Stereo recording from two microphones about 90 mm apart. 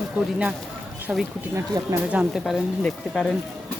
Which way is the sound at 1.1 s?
15° right (ahead or behind).